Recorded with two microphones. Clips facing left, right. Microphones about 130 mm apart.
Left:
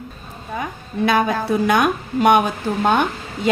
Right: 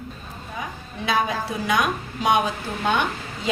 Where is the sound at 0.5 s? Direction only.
55° left (ahead or behind).